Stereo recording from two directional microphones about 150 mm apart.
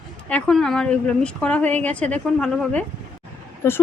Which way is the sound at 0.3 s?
5° left (ahead or behind).